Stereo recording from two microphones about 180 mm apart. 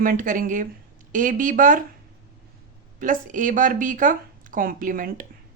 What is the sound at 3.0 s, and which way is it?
A woman's voice, 45° right (ahead or behind).